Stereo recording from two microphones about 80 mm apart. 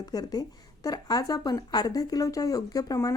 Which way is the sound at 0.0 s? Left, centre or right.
Left.